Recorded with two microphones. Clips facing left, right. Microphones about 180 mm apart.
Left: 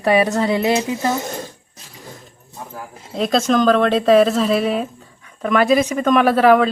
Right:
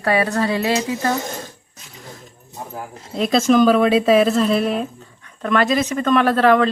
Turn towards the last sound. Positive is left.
turn(degrees=10)  # may be behind; listen again after turning